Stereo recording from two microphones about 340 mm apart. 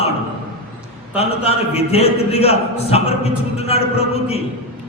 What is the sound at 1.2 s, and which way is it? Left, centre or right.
A man's voice, centre.